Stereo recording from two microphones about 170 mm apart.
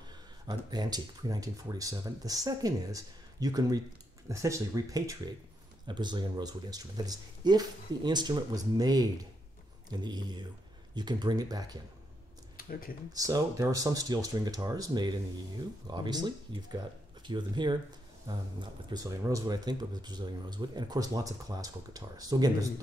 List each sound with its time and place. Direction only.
0.5 s speech: 25° right (ahead or behind)
12.5 s speech: 55° left (ahead or behind)
13.1 s speech: 20° right (ahead or behind)